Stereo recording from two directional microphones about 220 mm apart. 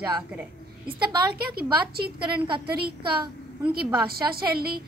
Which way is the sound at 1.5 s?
45° right (ahead or behind).